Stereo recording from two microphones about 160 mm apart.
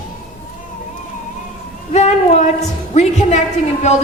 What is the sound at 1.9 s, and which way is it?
A woman's voice, 45° left (ahead or behind).